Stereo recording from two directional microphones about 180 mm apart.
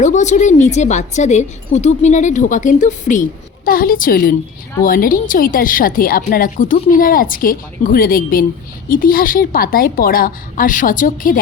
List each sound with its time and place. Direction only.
0.0 s a woman's voice: 40° left (ahead or behind)